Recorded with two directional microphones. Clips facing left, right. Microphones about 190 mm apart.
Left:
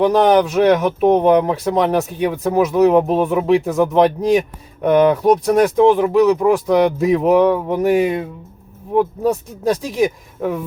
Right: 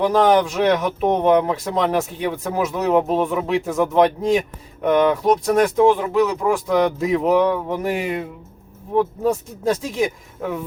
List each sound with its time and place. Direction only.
0.0 s speech: 15° left (ahead or behind)
9.0 s speech: 15° left (ahead or behind)